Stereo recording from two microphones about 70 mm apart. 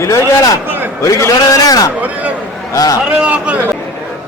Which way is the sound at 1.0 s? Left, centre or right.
Left.